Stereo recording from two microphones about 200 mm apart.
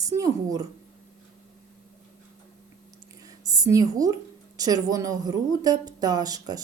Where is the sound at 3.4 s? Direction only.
15° right (ahead or behind).